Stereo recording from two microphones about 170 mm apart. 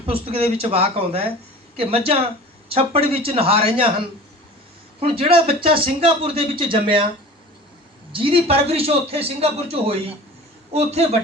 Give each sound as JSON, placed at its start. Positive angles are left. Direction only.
{"t": 0.0, "sound": "speech", "side_deg": -35}
{"t": 4.9, "sound": "speech", "side_deg": -35}
{"t": 8.1, "sound": "speech", "side_deg": -30}